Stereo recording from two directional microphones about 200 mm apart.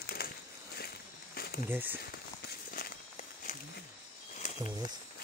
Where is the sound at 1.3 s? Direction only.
50° left (ahead or behind).